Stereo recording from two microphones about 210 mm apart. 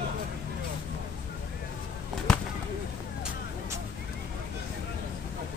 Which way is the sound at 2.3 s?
Centre (ahead or behind).